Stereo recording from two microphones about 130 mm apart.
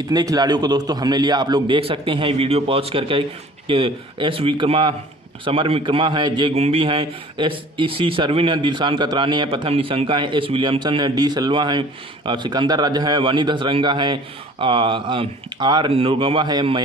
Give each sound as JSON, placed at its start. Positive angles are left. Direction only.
{"t": 0.1, "sound": "a man's voice", "side_deg": -30}
{"t": 6.5, "sound": "a man's voice", "side_deg": -50}